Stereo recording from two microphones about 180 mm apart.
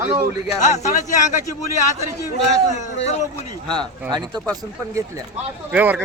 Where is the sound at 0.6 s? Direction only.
40° left (ahead or behind).